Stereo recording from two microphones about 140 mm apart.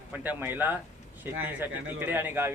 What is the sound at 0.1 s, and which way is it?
A man's voice, 10° right (ahead or behind).